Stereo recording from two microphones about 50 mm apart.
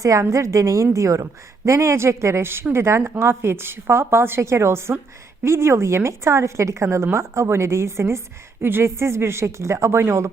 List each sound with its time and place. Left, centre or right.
0.0 s a woman's voice: right
1.6 s a woman's voice: right
6.9 s a woman's voice: right